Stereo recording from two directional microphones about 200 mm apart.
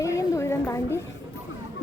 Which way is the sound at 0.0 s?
15° left (ahead or behind).